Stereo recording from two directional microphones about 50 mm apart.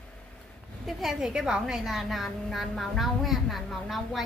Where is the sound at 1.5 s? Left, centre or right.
Centre.